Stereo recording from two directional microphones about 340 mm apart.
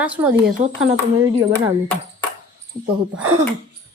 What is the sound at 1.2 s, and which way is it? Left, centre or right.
Speech, centre.